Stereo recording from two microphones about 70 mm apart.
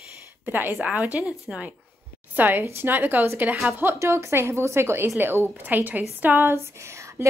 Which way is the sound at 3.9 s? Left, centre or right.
Right.